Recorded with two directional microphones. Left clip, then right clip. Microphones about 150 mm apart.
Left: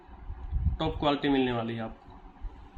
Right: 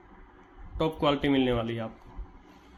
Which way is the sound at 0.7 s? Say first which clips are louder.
Right 2 dB; 20° right (ahead or behind).